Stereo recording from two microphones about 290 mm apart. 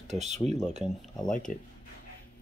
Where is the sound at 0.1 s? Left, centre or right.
Right.